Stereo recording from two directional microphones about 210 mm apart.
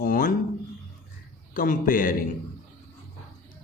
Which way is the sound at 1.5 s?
40° left (ahead or behind).